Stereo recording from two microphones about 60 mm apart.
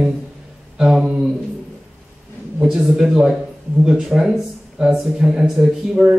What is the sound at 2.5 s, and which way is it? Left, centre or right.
Speech, centre.